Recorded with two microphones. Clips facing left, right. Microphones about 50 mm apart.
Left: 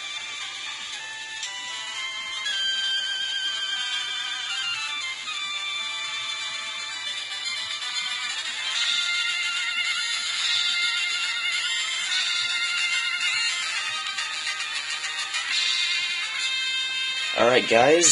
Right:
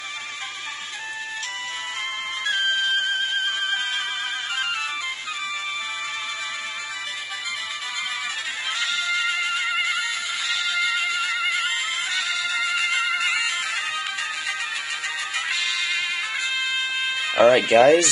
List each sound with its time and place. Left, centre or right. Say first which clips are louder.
2.4 s music: right 6 dB; right
8.7 s music: right 2 dB; centre
12.1 s music: right 2 dB; right
15.3 s music: right 1 dB; right
17.4 s speech: right 4 dB; centre